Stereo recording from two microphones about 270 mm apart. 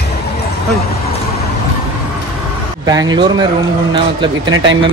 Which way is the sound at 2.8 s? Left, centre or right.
Centre.